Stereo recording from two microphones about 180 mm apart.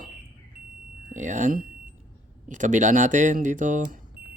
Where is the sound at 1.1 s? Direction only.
40° right (ahead or behind).